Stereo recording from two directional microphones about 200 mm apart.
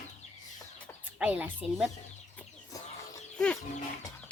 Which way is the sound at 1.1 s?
5° right (ahead or behind).